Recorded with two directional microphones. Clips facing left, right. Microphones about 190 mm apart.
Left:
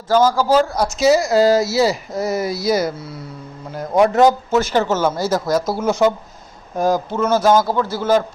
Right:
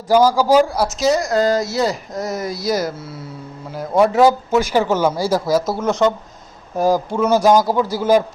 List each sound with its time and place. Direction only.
0.1 s speech: 10° right (ahead or behind); by 6.1 s 5° left (ahead or behind)
6.7 s speech: 10° right (ahead or behind)